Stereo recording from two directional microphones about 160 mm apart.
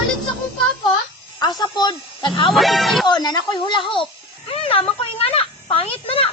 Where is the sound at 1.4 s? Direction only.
25° left (ahead or behind).